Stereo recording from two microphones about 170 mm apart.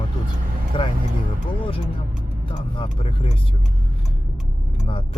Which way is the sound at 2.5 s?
30° left (ahead or behind).